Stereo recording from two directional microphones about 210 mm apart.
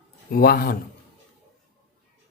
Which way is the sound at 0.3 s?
45° left (ahead or behind).